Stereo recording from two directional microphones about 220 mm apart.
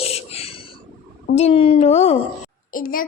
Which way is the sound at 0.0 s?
25° left (ahead or behind).